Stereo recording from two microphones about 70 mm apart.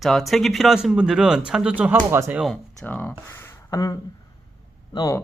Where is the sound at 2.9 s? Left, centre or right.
Left.